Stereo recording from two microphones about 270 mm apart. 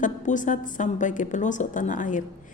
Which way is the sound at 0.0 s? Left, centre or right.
Left.